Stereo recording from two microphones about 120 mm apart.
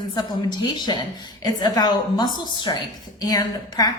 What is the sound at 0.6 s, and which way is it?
A woman's voice, 40° left (ahead or behind).